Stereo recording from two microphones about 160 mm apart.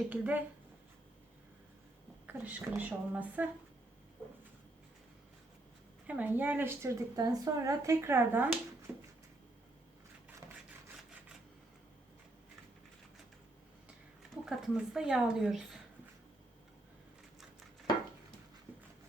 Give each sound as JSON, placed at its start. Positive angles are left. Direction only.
{"t": 0.1, "sound": "a woman's voice", "side_deg": -10}
{"t": 2.2, "sound": "a woman's voice", "side_deg": -10}
{"t": 6.1, "sound": "a woman's voice", "side_deg": -10}
{"t": 14.4, "sound": "speech", "side_deg": -5}